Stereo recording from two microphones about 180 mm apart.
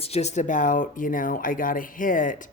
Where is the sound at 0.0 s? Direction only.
35° left (ahead or behind).